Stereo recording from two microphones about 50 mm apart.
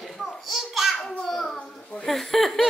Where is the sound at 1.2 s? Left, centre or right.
Centre.